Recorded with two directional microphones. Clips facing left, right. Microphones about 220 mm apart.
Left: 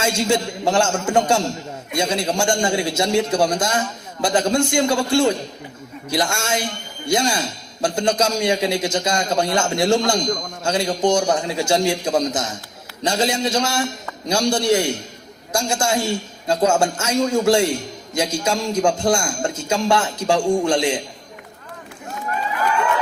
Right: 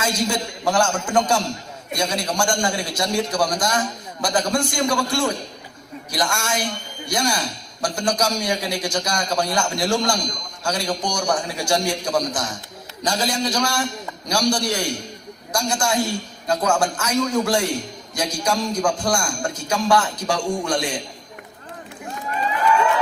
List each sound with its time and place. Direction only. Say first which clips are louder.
0.0 s a man's voice: left 4 dB; 25° left (ahead or behind)